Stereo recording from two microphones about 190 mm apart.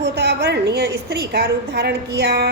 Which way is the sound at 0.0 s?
65° right (ahead or behind).